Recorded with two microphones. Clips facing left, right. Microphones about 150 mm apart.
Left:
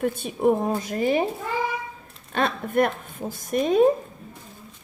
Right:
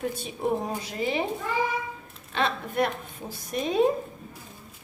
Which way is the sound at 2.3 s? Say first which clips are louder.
Left 4 dB; 50° left (ahead or behind).